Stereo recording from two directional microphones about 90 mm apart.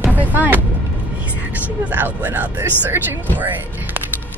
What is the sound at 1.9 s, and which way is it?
Speech, 20° right (ahead or behind).